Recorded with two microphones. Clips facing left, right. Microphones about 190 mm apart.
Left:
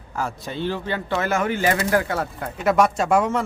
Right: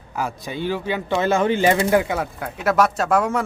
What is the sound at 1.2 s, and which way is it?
Speech, 25° right (ahead or behind).